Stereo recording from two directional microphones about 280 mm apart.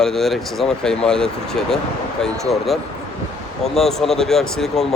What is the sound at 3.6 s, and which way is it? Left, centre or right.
A man's voice, centre.